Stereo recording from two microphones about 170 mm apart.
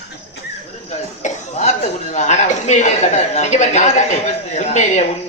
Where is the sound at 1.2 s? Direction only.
45° left (ahead or behind).